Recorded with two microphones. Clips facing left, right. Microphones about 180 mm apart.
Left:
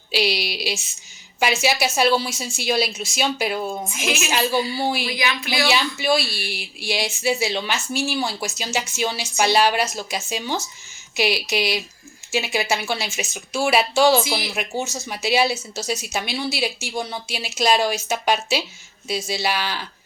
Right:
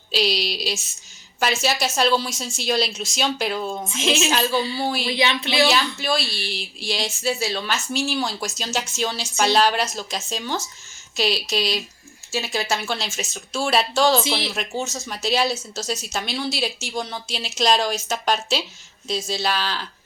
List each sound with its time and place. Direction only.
0.1 s speech: 10° left (ahead or behind)
4.0 s speech: 25° right (ahead or behind)
4.3 s speech: 10° left (ahead or behind)
5.0 s speech: 30° right (ahead or behind)
5.6 s speech: 10° left (ahead or behind)
14.3 s speech: 25° right (ahead or behind)
14.5 s speech: 10° left (ahead or behind)